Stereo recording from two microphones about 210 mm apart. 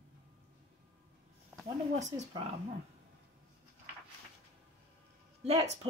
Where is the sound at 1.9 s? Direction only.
35° right (ahead or behind).